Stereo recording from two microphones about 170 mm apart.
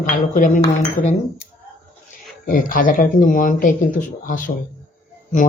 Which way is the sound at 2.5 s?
55° left (ahead or behind).